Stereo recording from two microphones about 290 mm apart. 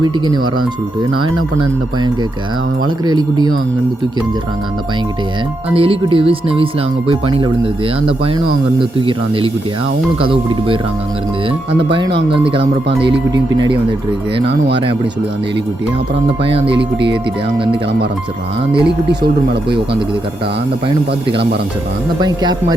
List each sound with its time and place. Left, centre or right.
3.1 s speech: centre
5.7 s speech: centre
11.8 s speech: centre
13.0 s speech: right
13.3 s speech: centre
16.6 s speech: right
19.5 s speech: right